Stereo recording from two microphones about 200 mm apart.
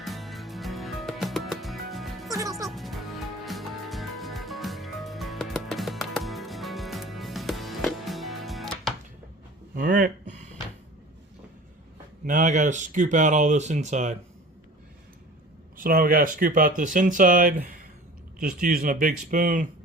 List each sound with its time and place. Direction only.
0.0 s music: centre (ahead or behind)
2.3 s music: 15° right (ahead or behind)
2.6 s music: centre (ahead or behind)
9.7 s a sound: 45° right (ahead or behind)
12.2 s speech: 40° right (ahead or behind)
15.8 s speech: 45° right (ahead or behind)